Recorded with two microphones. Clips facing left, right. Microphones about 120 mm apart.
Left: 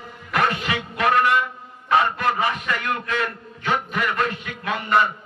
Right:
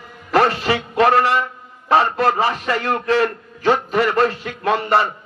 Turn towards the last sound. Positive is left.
turn(degrees=-35)  # may be behind; listen again after turning